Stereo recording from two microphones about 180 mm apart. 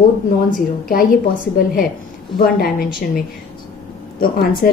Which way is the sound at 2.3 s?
55° left (ahead or behind).